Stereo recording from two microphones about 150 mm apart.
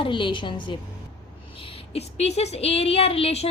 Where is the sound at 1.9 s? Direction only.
45° left (ahead or behind).